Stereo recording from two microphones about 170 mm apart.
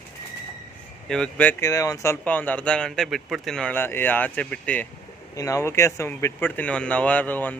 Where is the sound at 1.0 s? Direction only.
5° left (ahead or behind).